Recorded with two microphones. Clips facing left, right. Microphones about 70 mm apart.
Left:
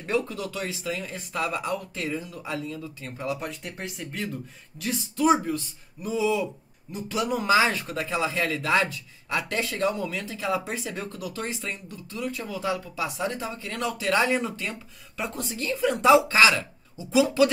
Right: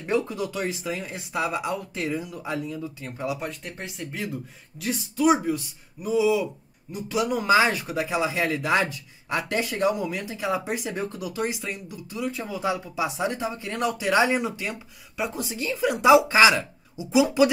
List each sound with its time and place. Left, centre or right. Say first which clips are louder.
0.0 s speech: right 2 dB; centre